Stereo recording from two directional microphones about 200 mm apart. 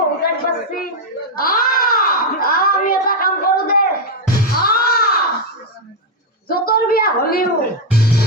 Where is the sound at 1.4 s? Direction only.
45° left (ahead or behind).